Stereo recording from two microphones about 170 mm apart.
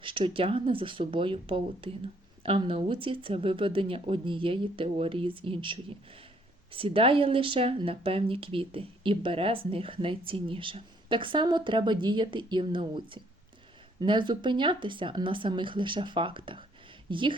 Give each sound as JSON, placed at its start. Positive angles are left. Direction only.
{"t": 0.0, "sound": "speech", "side_deg": -30}